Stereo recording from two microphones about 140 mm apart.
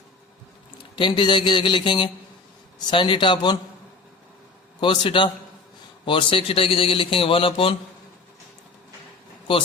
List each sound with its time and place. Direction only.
0.9 s a man's voice: 35° left (ahead or behind)
4.8 s a man's voice: 35° left (ahead or behind)